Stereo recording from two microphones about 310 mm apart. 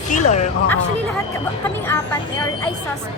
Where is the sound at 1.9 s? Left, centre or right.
Centre.